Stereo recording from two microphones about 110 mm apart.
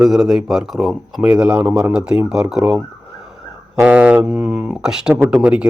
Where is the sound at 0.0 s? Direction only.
5° right (ahead or behind).